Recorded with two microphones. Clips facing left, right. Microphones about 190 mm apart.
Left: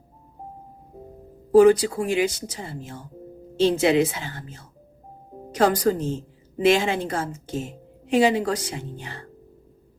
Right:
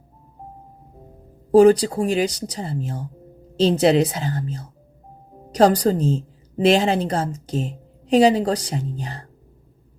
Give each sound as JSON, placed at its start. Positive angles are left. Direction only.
{"t": 1.5, "sound": "a woman's voice", "side_deg": -35}